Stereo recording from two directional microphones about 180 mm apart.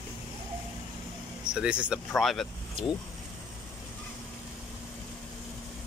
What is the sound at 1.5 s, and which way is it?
Speech, 5° right (ahead or behind).